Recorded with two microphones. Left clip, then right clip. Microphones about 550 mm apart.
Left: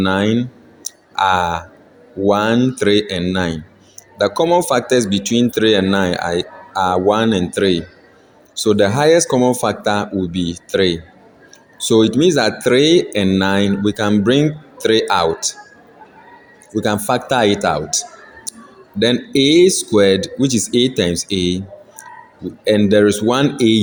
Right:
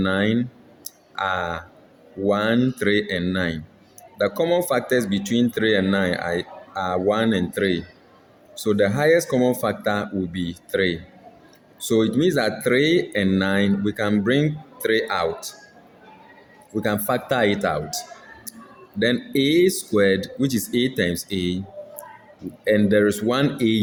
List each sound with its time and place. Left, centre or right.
0.0 s speech: right
0.9 s clicking: right
2.2 s speech: right
16.7 s speech: right
18.5 s a sound: right
18.9 s speech: right
22.6 s speech: right